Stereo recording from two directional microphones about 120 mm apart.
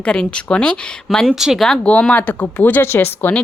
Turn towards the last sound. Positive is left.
turn(degrees=15)  # may be behind; listen again after turning